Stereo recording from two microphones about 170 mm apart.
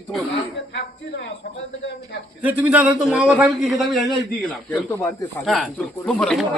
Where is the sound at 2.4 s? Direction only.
10° right (ahead or behind).